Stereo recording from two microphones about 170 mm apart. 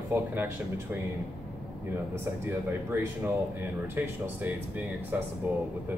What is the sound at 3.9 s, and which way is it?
Speech, 10° right (ahead or behind).